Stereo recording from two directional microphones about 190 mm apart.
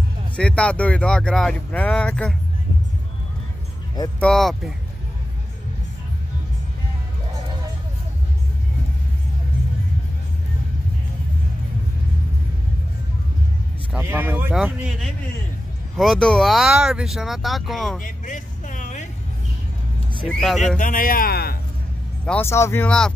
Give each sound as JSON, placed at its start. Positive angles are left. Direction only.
{"t": 0.4, "sound": "speech", "side_deg": 5}
{"t": 4.2, "sound": "speech", "side_deg": 0}
{"t": 13.9, "sound": "speech", "side_deg": -10}
{"t": 18.0, "sound": "vehicle", "side_deg": 45}
{"t": 20.2, "sound": "speech", "side_deg": 0}
{"t": 20.7, "sound": "a man's voice", "side_deg": 45}
{"t": 22.2, "sound": "speech", "side_deg": 10}